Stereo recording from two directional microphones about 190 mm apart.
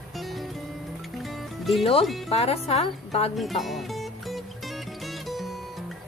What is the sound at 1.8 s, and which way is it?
A woman's voice, 30° left (ahead or behind).